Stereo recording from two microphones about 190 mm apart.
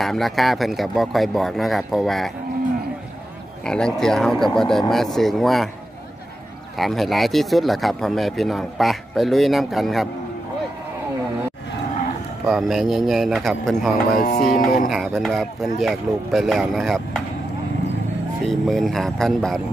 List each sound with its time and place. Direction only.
0.0 s a man's voice: centre (ahead or behind)
3.6 s a man's voice: 5° left (ahead or behind)
6.8 s a man's voice: centre (ahead or behind)
12.4 s a man's voice: centre (ahead or behind)
14.1 s music: 50° left (ahead or behind)
14.9 s a man's voice: centre (ahead or behind)
18.4 s a man's voice: centre (ahead or behind)